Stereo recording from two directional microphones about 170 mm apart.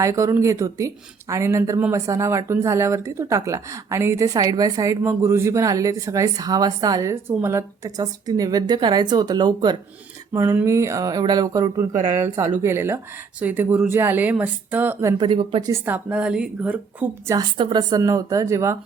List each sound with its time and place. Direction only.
0.0 s speech: 15° right (ahead or behind)
15.2 s a woman's voice: 30° right (ahead or behind)
15.7 s speech: 10° right (ahead or behind)
17.3 s speech: 25° right (ahead or behind)